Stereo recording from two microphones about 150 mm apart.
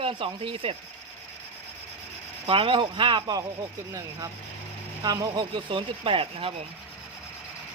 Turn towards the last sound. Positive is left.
turn(degrees=-35)  # may be behind; listen again after turning